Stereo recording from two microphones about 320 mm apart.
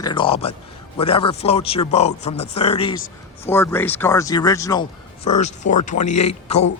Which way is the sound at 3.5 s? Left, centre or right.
Centre.